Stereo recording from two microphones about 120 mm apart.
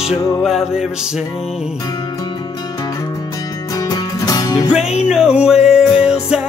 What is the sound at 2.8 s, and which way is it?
Music, 30° left (ahead or behind).